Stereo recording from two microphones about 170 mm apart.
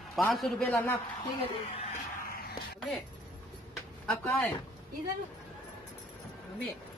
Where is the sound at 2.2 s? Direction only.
60° left (ahead or behind).